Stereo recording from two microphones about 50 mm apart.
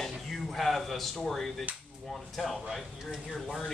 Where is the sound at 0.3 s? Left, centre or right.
Centre.